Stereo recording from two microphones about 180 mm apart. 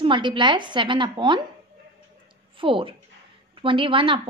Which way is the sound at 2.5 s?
30° right (ahead or behind).